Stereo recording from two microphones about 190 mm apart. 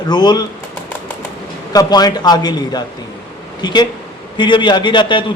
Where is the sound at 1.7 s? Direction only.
20° left (ahead or behind).